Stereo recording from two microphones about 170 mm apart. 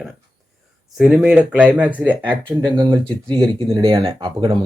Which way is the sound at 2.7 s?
30° right (ahead or behind).